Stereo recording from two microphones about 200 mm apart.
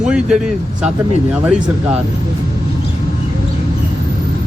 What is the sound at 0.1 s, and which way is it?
A man's voice, 5° right (ahead or behind).